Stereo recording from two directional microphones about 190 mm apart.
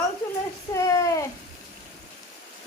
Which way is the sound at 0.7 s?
15° left (ahead or behind).